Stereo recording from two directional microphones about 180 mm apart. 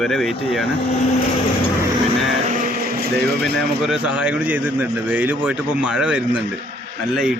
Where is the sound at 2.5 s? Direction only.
45° right (ahead or behind).